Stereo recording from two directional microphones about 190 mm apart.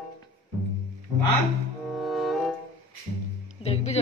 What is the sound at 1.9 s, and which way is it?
Music, centre (ahead or behind).